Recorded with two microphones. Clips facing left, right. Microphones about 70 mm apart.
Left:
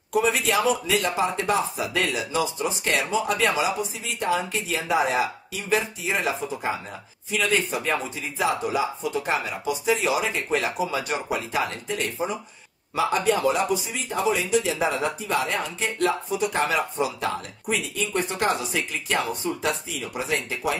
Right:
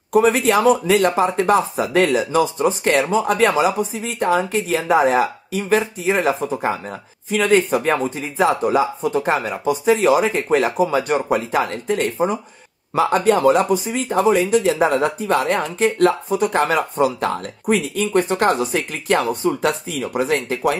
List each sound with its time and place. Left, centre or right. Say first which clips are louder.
0.1 s speech: right 7 dB; right